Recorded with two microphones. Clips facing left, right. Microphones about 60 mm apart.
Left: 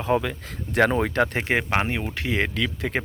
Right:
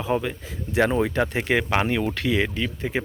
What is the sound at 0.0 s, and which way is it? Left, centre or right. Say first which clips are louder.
Speech: left 1 dB; left.